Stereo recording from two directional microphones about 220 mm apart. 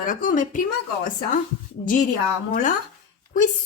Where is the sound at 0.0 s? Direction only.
40° left (ahead or behind).